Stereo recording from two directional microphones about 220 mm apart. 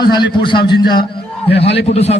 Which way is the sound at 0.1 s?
20° left (ahead or behind).